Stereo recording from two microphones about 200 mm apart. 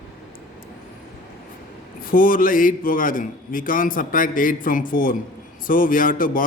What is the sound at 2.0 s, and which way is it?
A man's voice, 45° left (ahead or behind).